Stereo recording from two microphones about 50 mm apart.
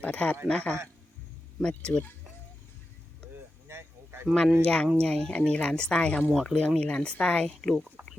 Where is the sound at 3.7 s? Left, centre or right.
Right.